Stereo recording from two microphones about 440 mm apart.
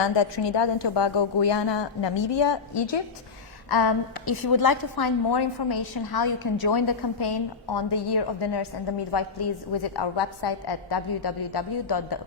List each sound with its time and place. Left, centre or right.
0.0 s a woman's voice: left
3.7 s a woman's voice: left
9.9 s a woman's voice: left